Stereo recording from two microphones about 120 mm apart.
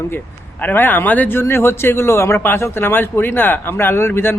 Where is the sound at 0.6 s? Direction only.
15° left (ahead or behind).